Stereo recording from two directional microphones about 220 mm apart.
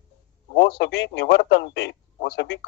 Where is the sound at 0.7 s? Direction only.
50° left (ahead or behind).